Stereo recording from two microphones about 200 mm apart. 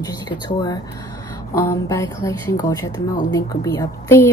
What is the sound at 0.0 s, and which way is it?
A woman's voice, 20° left (ahead or behind).